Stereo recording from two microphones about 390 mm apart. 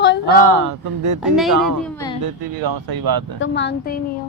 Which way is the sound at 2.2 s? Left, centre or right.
Right.